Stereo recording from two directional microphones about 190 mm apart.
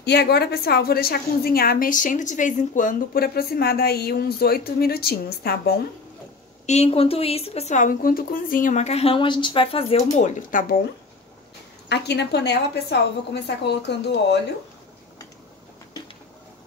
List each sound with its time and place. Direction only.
0.0 s a woman's voice: 60° left (ahead or behind)
6.6 s speech: 35° left (ahead or behind)
10.1 s a woman's voice: 45° left (ahead or behind)
11.9 s a woman's voice: 60° left (ahead or behind)